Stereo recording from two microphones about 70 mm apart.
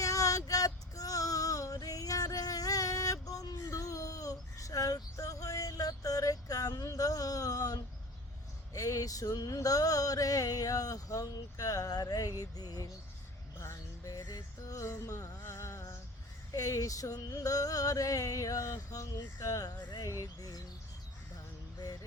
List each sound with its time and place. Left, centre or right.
0.0 s female singing: left
3.7 s child singing: left
8.7 s a sound: left
13.6 s music: left
14.1 s music: left
15.4 s a sound: left
20.1 s bird: left